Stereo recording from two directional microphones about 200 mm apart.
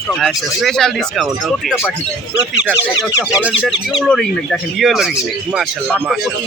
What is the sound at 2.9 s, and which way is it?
Speech, 15° left (ahead or behind).